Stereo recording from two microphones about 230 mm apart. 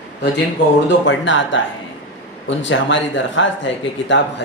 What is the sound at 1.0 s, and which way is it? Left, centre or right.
Speech, left.